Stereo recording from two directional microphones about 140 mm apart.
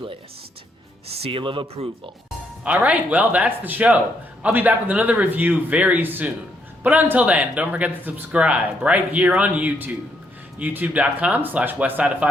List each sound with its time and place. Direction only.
1.0 s speech: 45° right (ahead or behind)
2.6 s speech: 10° right (ahead or behind)